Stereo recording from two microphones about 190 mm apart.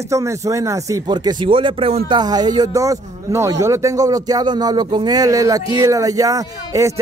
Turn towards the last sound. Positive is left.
turn(degrees=-15)  # may be behind; listen again after turning